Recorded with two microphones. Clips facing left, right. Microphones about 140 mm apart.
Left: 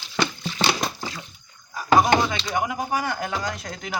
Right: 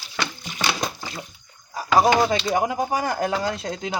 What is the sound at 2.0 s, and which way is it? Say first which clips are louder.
Speech: right 4 dB; 35° right (ahead or behind).